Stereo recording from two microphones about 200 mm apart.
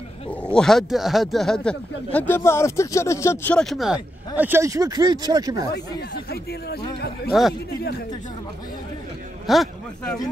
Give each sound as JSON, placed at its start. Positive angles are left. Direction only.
{"t": 0.3, "sound": "speech", "side_deg": 5}
{"t": 4.4, "sound": "speech", "side_deg": -10}
{"t": 7.3, "sound": "speech", "side_deg": 0}
{"t": 9.5, "sound": "speech", "side_deg": 0}